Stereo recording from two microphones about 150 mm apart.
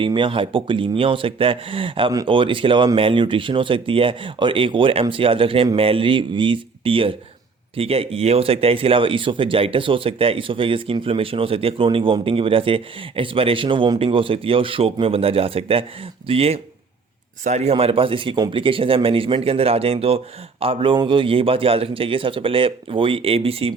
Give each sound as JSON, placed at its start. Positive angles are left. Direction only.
{"t": 0.0, "sound": "speech", "side_deg": -35}